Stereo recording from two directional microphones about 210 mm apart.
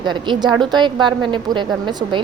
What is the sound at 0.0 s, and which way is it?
A woman's voice, 20° right (ahead or behind).